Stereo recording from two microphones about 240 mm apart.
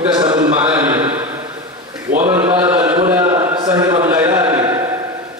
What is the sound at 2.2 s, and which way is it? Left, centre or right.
Mantra, right.